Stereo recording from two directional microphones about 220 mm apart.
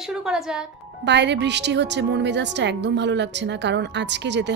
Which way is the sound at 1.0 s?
50° right (ahead or behind).